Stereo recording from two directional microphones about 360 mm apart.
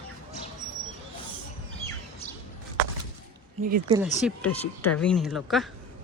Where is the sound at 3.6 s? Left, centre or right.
Right.